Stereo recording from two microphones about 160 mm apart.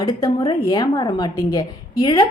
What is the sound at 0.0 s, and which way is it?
A woman's voice, 25° left (ahead or behind).